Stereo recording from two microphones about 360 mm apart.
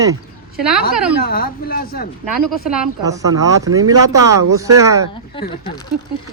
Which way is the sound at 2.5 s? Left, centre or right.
Centre.